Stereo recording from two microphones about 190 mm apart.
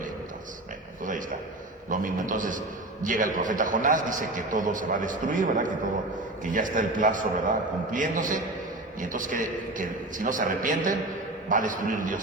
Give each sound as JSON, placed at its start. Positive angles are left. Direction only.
{"t": 1.9, "sound": "a man's voice", "side_deg": -45}